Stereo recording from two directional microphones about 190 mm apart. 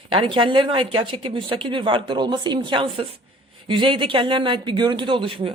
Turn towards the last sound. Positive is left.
turn(degrees=-25)  # may be behind; listen again after turning